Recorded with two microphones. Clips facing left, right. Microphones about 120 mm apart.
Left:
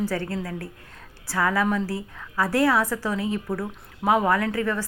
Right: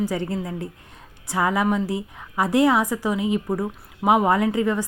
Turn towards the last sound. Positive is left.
turn(degrees=-20)  # may be behind; listen again after turning